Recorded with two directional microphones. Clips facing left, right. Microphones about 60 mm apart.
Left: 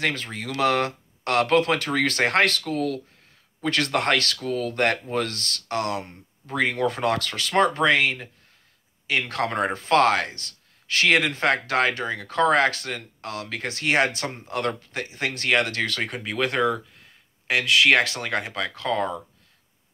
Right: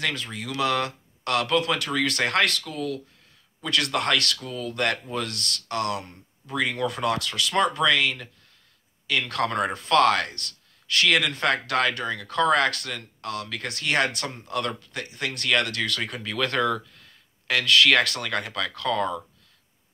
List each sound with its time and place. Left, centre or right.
0.0 s speech: left
3.6 s speech: left
4.5 s speech: left
5.1 s speech: left